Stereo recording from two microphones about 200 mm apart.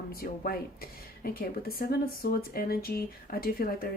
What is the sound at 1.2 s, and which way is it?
Speech, 45° left (ahead or behind).